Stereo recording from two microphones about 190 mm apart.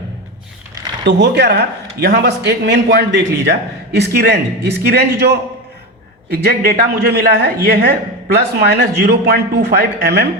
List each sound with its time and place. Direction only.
1.0 s speech: 60° right (ahead or behind)